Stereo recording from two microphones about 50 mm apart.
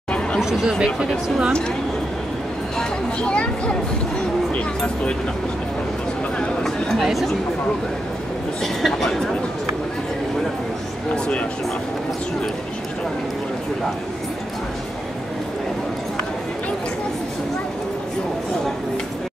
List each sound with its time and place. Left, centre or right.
0.4 s speech: centre
2.8 s speech: centre
7.0 s speech: centre
8.8 s speech: centre